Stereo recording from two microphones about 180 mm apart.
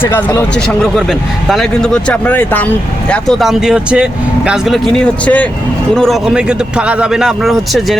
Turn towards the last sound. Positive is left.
turn(degrees=0)  # may be behind; listen again after turning